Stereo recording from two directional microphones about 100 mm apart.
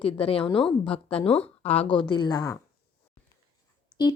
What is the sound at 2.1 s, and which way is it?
Speech, 45° left (ahead or behind).